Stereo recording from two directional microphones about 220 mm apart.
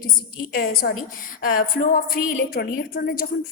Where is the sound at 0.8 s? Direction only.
50° left (ahead or behind).